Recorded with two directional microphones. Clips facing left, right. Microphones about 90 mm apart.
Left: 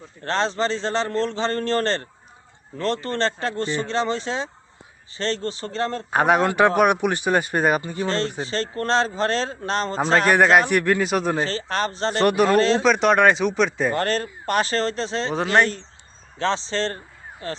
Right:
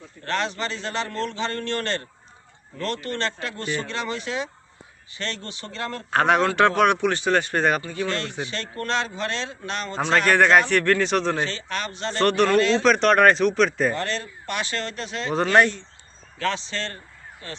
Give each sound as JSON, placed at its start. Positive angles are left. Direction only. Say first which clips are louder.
{"t": 0.3, "sound": "a man's voice", "louder": "left 4 dB", "side_deg": 30}
{"t": 6.1, "sound": "speech", "louder": "even", "side_deg": 10}
{"t": 7.8, "sound": "speech", "louder": "left 1 dB", "side_deg": 20}
{"t": 8.0, "sound": "a man's voice", "louder": "left 3 dB", "side_deg": 35}
{"t": 10.6, "sound": "speech", "louder": "left 1 dB", "side_deg": 15}
{"t": 11.4, "sound": "a man's voice", "louder": "left 5 dB", "side_deg": 35}
{"t": 12.2, "sound": "speech", "louder": "left 1 dB", "side_deg": 10}
{"t": 12.5, "sound": "a man's voice", "louder": "left 1 dB", "side_deg": 35}
{"t": 12.8, "sound": "speech", "louder": "even", "side_deg": 5}
{"t": 13.9, "sound": "a man's voice", "louder": "left 5 dB", "side_deg": 45}
{"t": 15.3, "sound": "speech", "louder": "right 2 dB", "side_deg": 0}
{"t": 16.4, "sound": "a man's voice", "louder": "left 4 dB", "side_deg": 30}